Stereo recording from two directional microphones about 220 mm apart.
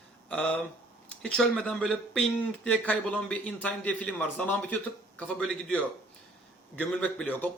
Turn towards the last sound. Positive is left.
turn(degrees=5)  # may be behind; listen again after turning